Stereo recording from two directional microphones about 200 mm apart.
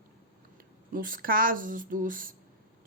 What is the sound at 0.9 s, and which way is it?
Speech, 45° right (ahead or behind).